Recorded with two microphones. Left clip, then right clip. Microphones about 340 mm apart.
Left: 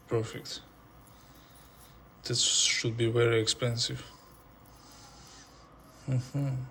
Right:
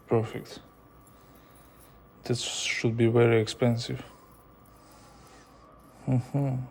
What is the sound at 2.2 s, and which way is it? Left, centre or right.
Speech, right.